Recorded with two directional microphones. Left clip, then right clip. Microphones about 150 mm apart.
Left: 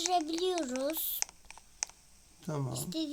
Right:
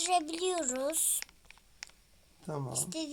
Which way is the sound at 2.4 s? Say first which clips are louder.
Left 1 dB; 25° left (ahead or behind).